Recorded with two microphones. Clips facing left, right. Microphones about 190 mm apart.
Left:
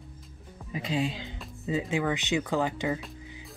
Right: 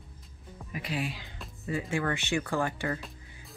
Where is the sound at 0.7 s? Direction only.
25° left (ahead or behind).